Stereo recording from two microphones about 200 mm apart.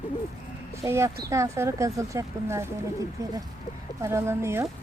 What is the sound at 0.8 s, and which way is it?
Speech, 15° right (ahead or behind).